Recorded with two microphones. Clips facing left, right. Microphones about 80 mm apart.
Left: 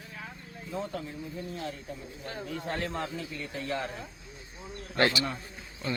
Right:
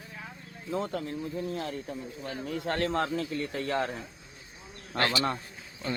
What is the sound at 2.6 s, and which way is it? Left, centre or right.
Speech, right.